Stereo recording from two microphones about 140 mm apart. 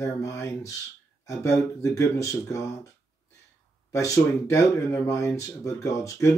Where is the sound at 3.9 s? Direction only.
20° left (ahead or behind).